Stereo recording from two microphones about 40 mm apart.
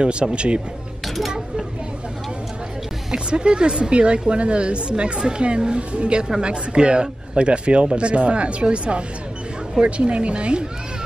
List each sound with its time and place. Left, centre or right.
0.0 s a man's voice: right
1.0 s a sound: centre
3.1 s a man's voice: right